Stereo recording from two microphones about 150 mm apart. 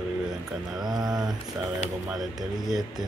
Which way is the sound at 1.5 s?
10° right (ahead or behind).